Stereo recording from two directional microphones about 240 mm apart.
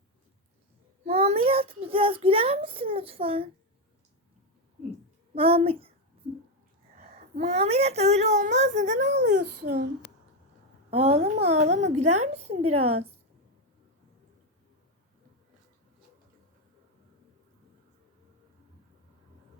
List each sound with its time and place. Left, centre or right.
1.0 s a child's voice: right
5.3 s a child's voice: right
6.9 s a woman's voice: right
9.0 s speech: right
10.9 s a woman's voice: right